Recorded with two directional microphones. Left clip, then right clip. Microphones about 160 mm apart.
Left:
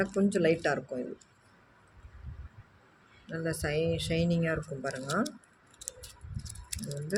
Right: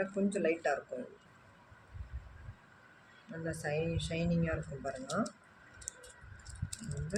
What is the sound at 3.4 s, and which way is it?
Speech, 60° left (ahead or behind).